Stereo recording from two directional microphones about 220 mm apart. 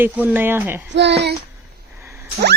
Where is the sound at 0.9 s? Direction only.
50° right (ahead or behind).